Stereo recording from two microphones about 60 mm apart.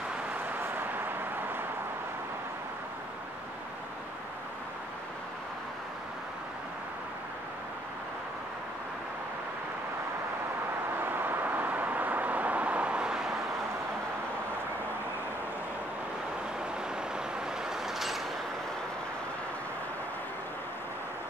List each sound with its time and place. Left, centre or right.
0.6 s vehicle: right
11.0 s vehicle: right; by 13.3 s centre
17.6 s vehicle: centre